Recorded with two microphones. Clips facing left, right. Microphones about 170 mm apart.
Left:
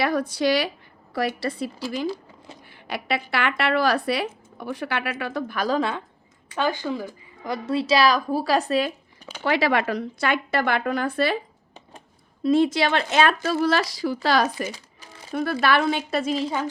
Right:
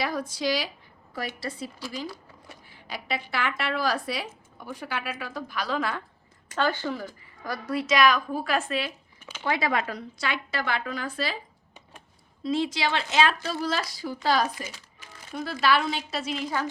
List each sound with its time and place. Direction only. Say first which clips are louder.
0.0 s speech: left 6 dB; 65° left (ahead or behind); by 5.8 s 45° left (ahead or behind)
6.6 s a woman's voice: left 2 dB; 15° left (ahead or behind); by 9.4 s 40° left (ahead or behind)
9.4 s speech: left 5 dB; 90° left; by 11.3 s 60° left (ahead or behind)
12.4 s speech: left 7 dB; 55° left (ahead or behind); by 14.7 s 75° left (ahead or behind)
15.3 s speech: left 3 dB; 60° left (ahead or behind)